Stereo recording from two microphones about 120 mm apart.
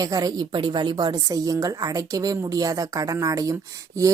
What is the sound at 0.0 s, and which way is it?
A woman's voice, 30° right (ahead or behind).